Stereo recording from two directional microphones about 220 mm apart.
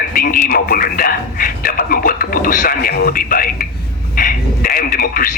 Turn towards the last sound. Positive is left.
turn(degrees=40)  # may be behind; listen again after turning